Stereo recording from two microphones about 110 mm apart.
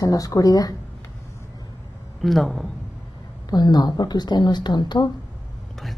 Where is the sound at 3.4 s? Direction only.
40° left (ahead or behind).